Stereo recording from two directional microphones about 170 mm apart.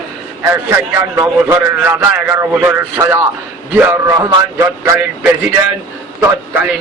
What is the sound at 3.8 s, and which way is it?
A man's voice, 15° right (ahead or behind).